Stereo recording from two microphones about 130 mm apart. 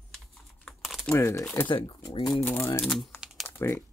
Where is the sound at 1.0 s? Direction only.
20° left (ahead or behind).